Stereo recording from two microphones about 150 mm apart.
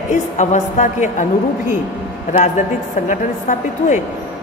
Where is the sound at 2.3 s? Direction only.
55° left (ahead or behind).